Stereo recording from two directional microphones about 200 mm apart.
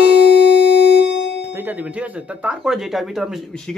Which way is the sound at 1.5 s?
10° right (ahead or behind).